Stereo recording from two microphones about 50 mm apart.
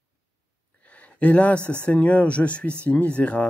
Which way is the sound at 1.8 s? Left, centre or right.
Left.